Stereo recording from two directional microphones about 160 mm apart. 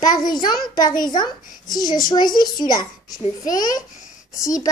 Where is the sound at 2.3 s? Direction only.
25° left (ahead or behind).